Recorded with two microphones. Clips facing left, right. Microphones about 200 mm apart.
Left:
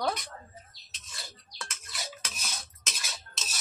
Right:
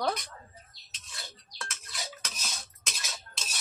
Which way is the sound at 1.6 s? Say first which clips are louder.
Right 1 dB; centre (ahead or behind).